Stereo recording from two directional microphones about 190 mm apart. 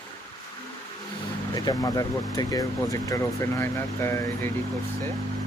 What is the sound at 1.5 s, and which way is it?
Speech, 20° left (ahead or behind).